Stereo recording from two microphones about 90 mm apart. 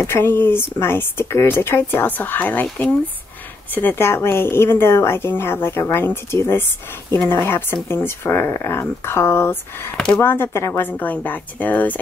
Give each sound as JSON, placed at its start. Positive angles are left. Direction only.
{"t": 0.0, "sound": "speech", "side_deg": 30}
{"t": 9.9, "sound": "speech", "side_deg": 10}
{"t": 10.2, "sound": "speech", "side_deg": 25}